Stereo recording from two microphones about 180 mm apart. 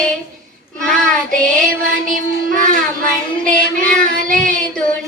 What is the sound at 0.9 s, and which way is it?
Child singing, 5° left (ahead or behind).